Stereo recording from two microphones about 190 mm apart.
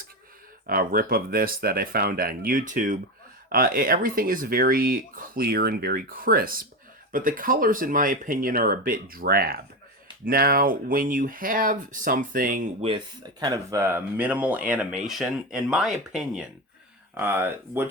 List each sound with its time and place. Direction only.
0.7 s speech: 50° right (ahead or behind)
13.4 s speech: 15° right (ahead or behind)